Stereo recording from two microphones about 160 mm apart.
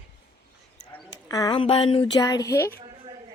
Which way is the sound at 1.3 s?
25° left (ahead or behind).